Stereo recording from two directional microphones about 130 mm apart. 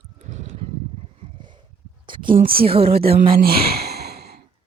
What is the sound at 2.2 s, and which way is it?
Speech, 90° right.